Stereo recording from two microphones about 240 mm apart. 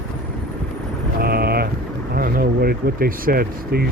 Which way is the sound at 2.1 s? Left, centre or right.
Right.